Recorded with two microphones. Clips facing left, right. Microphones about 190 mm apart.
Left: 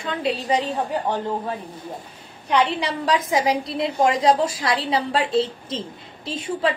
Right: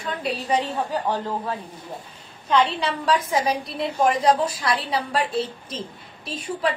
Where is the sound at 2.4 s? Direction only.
15° left (ahead or behind).